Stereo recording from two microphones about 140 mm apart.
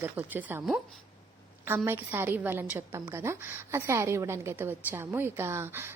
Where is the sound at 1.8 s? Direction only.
15° right (ahead or behind).